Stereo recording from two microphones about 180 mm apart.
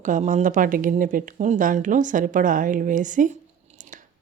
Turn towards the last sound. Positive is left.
turn(degrees=-45)  # may be behind; listen again after turning